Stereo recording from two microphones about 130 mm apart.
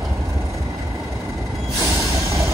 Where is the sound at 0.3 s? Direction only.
25° right (ahead or behind).